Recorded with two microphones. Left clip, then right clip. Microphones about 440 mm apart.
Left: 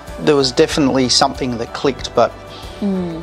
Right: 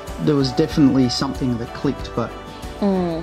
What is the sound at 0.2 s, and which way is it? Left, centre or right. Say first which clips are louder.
Speech: left 6 dB; left.